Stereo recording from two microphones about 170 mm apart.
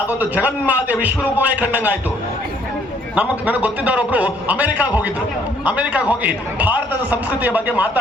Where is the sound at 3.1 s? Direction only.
10° right (ahead or behind).